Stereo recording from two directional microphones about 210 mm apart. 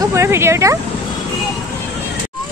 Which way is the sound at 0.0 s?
15° right (ahead or behind).